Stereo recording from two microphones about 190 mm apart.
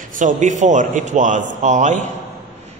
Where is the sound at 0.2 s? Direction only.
40° right (ahead or behind).